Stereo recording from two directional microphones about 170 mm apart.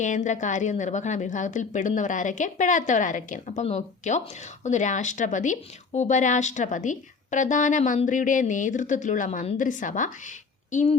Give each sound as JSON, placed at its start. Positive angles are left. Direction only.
{"t": 0.0, "sound": "speech", "side_deg": 45}